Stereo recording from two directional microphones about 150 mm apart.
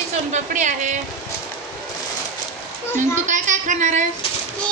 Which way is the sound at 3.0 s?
55° right (ahead or behind).